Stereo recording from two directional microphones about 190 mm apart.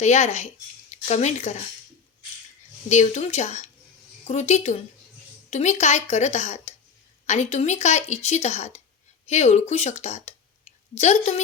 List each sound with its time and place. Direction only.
0.0 s speech: 35° left (ahead or behind)
2.9 s speech: 35° left (ahead or behind)